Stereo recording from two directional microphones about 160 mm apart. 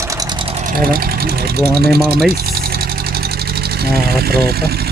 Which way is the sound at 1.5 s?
80° right.